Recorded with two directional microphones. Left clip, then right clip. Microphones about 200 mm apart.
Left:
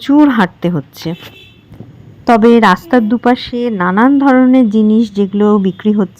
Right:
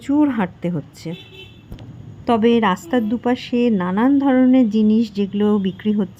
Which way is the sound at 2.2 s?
15° left (ahead or behind).